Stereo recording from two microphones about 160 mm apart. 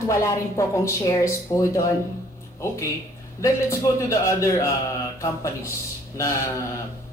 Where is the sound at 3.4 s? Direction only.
20° left (ahead or behind).